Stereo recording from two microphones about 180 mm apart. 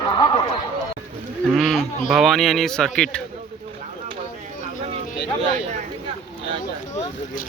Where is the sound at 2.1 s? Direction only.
Centre (ahead or behind).